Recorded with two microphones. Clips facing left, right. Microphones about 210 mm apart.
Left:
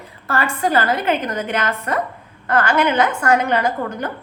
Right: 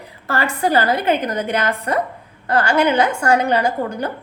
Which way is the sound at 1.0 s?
35° right (ahead or behind).